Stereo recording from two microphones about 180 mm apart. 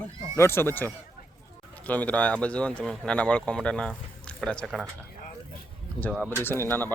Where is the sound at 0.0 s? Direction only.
15° left (ahead or behind).